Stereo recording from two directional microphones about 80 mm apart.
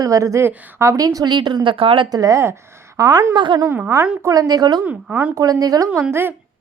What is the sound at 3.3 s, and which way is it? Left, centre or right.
Speech, right.